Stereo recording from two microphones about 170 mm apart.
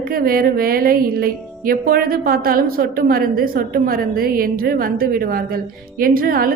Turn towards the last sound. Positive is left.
turn(degrees=-60)  # may be behind; listen again after turning